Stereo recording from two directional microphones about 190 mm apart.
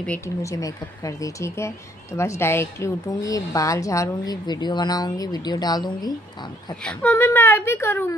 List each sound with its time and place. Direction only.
0.0 s a woman's voice: 10° left (ahead or behind)
6.8 s speech: 5° left (ahead or behind)